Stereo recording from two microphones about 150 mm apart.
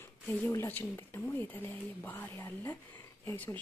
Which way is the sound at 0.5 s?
15° left (ahead or behind).